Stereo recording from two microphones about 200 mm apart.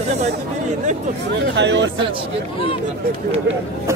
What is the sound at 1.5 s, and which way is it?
Speech, 60° right (ahead or behind).